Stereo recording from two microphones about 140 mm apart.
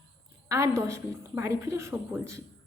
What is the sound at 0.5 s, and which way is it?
A woman's voice, 20° right (ahead or behind).